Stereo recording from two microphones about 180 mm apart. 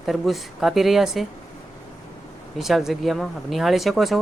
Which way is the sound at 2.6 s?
Centre (ahead or behind).